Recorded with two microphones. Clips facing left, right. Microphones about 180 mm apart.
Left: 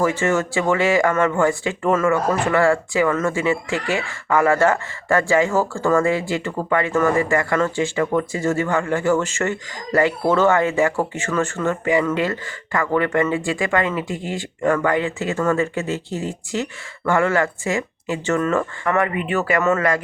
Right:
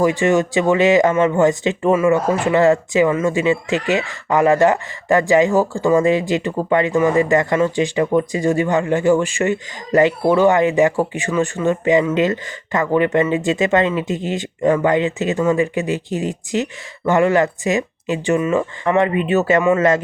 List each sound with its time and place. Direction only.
0.0 s speech: 15° right (ahead or behind)